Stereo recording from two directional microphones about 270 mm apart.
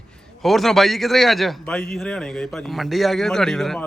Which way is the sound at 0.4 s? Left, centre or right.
Centre.